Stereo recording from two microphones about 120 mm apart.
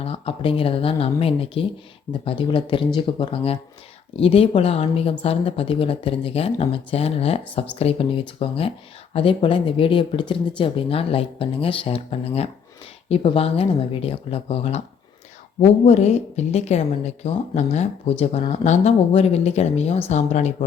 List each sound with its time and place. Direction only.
0.0 s a woman's voice: 50° left (ahead or behind); by 20.7 s 75° left (ahead or behind)